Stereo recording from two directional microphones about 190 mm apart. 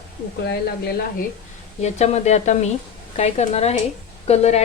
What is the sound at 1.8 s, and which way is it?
A woman's voice, 35° left (ahead or behind).